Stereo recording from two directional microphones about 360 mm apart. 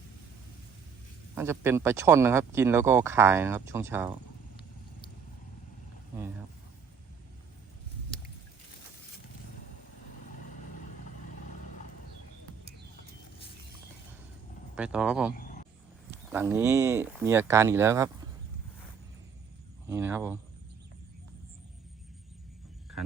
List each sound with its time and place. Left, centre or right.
1.4 s speech: centre
14.8 s speech: centre
15.4 s a sound: left
16.1 s speech: centre
19.9 s speech: centre